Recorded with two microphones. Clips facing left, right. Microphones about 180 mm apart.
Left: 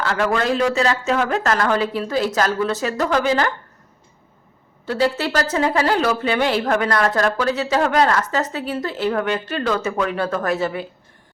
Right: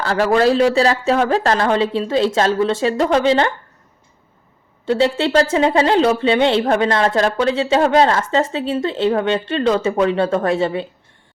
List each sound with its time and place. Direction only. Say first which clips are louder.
0.0 s a woman's voice: right 5 dB; 35° right (ahead or behind)
4.9 s a woman's voice: right 4 dB; 25° right (ahead or behind)